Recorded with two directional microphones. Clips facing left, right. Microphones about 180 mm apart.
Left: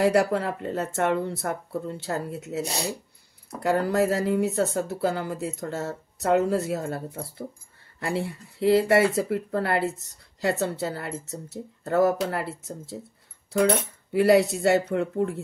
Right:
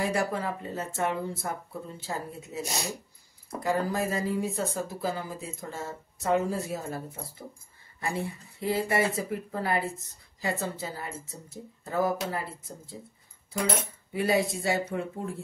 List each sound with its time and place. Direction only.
0.0 s speech: 70° left (ahead or behind)
2.7 s speech: 35° left (ahead or behind)
3.6 s speech: 70° left (ahead or behind)
14.1 s speech: 70° left (ahead or behind)